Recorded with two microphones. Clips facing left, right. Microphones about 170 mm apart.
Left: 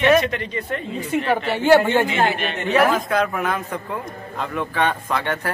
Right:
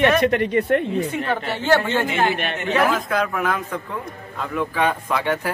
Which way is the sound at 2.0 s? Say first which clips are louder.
Even; 55° right (ahead or behind).